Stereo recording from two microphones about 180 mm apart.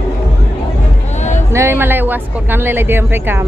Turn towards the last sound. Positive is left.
turn(degrees=-10)  # may be behind; listen again after turning